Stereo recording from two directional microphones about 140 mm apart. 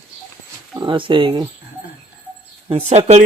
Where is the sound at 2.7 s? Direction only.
50° right (ahead or behind).